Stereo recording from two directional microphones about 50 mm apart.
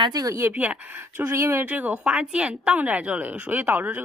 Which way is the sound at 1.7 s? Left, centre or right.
Right.